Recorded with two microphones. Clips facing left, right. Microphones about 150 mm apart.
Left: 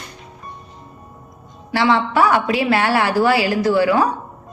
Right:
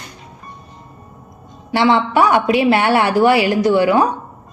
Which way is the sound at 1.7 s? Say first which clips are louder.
Right 3 dB; 20° right (ahead or behind).